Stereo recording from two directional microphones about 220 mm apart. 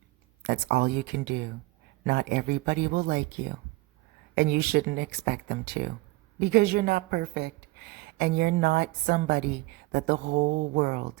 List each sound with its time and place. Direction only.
0.4 s a woman's voice: 45° right (ahead or behind)
4.4 s a woman's voice: 45° right (ahead or behind)